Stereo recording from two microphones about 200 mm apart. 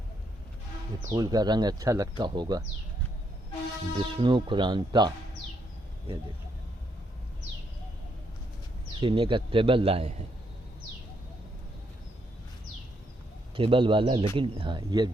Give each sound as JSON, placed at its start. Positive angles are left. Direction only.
{"t": 1.1, "sound": "speech", "side_deg": -20}
{"t": 3.9, "sound": "speech", "side_deg": -25}
{"t": 9.0, "sound": "speech", "side_deg": -25}
{"t": 13.6, "sound": "speech", "side_deg": -25}